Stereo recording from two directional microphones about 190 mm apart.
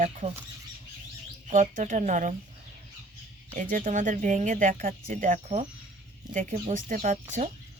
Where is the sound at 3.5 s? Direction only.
45° right (ahead or behind).